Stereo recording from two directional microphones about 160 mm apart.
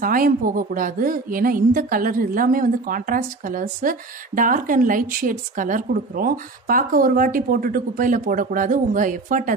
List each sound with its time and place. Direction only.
0.0 s a woman's voice: 60° right (ahead or behind)